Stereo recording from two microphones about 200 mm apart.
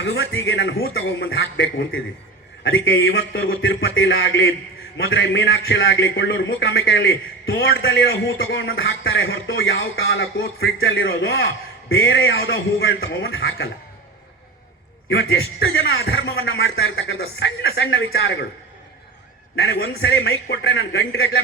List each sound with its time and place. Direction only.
0.1 s a man's voice: 65° left (ahead or behind); by 8.2 s 50° left (ahead or behind)
8.4 s a man's voice: 65° left (ahead or behind)
11.9 s a man's voice: 70° left (ahead or behind); by 13.7 s 55° left (ahead or behind)
15.1 s speech: 55° left (ahead or behind)
19.5 s a man's voice: 55° left (ahead or behind)